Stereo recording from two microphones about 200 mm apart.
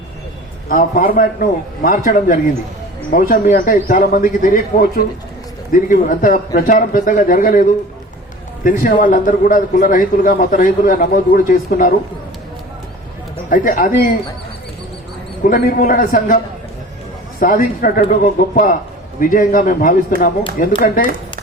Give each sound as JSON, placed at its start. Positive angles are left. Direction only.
{"t": 0.7, "sound": "a man's voice", "side_deg": 45}
{"t": 8.6, "sound": "a man's voice", "side_deg": 40}
{"t": 13.5, "sound": "a man's voice", "side_deg": 40}
{"t": 15.4, "sound": "a man's voice", "side_deg": 45}
{"t": 17.4, "sound": "a man's voice", "side_deg": 45}